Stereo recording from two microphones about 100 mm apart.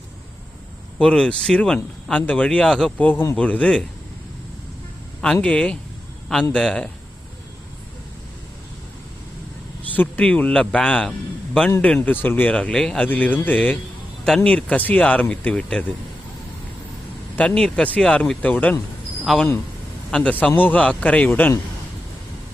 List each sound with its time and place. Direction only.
0.9 s speech: 10° left (ahead or behind)
3.0 s speech: 20° left (ahead or behind)
5.2 s speech: 10° left (ahead or behind)
9.9 s speech: 15° left (ahead or behind)
17.3 s speech: 10° left (ahead or behind)
19.2 s a man's voice: centre (ahead or behind); by 21.5 s 20° left (ahead or behind)